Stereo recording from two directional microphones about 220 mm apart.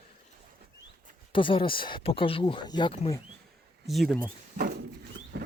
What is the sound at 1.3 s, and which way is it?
Speech, 25° left (ahead or behind).